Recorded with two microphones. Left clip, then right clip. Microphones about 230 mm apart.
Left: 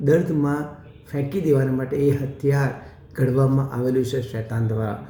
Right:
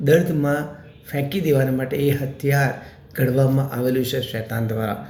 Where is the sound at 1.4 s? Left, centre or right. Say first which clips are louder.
Right 1 dB; centre.